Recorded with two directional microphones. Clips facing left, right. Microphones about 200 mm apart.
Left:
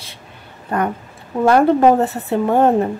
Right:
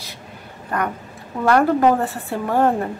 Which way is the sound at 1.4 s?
25° left (ahead or behind).